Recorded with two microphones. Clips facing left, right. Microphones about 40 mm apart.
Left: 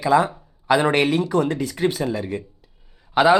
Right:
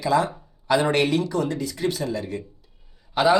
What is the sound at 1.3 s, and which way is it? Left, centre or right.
Speech, left.